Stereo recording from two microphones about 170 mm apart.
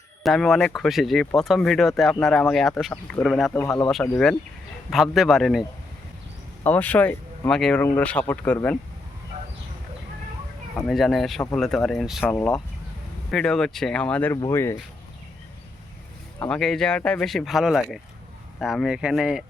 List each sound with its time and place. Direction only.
0.2 s speech: centre (ahead or behind)
3.5 s speech: 15° left (ahead or behind)
4.9 s speech: centre (ahead or behind)
6.7 s speech: 10° left (ahead or behind)
10.8 s speech: centre (ahead or behind)
12.2 s speech: 10° left (ahead or behind)
16.4 s speech: 5° left (ahead or behind)